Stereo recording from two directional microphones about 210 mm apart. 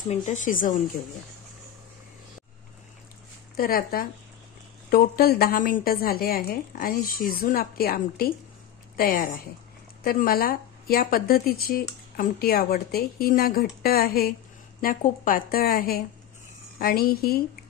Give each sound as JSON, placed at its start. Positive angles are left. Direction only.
{"t": 0.1, "sound": "speech", "side_deg": 35}
{"t": 3.5, "sound": "speech", "side_deg": 45}